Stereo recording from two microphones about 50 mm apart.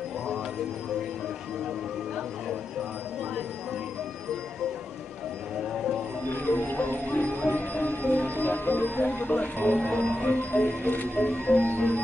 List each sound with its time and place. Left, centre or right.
6.3 s music: left
10.2 s speech: left